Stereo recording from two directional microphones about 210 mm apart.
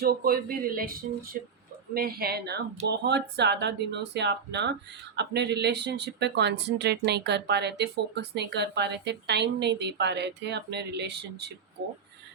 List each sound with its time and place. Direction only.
0.0 s speech: 45° right (ahead or behind)